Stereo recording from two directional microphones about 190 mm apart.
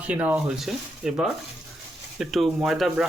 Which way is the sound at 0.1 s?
5° right (ahead or behind).